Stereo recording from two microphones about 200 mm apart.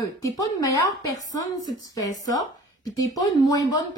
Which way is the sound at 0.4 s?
15° left (ahead or behind).